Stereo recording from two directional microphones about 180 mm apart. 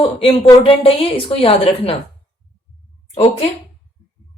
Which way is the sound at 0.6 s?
30° left (ahead or behind).